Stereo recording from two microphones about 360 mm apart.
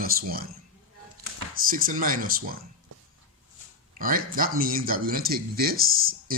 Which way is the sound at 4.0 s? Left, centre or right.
Right.